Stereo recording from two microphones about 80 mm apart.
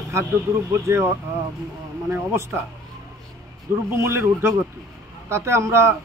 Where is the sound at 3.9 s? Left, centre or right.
Right.